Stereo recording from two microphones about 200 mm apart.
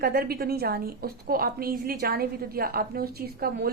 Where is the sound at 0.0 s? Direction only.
50° right (ahead or behind).